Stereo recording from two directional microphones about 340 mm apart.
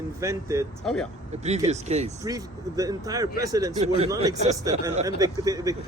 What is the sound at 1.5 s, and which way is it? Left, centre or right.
A man's voice, centre.